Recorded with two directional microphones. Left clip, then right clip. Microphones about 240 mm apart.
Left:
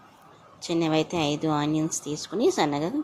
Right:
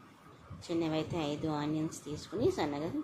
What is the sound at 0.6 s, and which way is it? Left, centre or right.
Speech, left.